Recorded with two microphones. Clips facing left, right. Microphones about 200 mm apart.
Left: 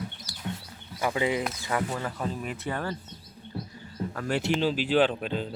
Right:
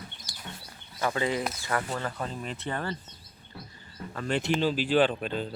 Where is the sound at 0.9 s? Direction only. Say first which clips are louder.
Left 1 dB; 10° left (ahead or behind).